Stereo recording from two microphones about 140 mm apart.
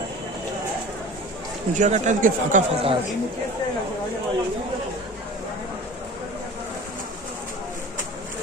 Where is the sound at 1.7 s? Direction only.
60° right (ahead or behind).